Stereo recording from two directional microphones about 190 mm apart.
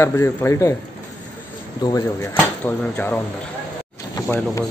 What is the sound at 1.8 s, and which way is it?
Speech, 20° left (ahead or behind).